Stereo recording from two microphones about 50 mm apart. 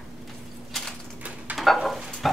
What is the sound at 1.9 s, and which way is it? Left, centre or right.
Stir, centre.